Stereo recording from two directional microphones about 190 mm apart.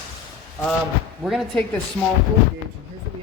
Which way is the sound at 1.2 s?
Centre (ahead or behind).